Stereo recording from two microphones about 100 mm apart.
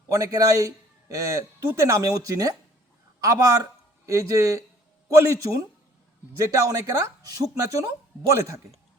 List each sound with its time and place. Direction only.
0.1 s a man's voice: 35° right (ahead or behind)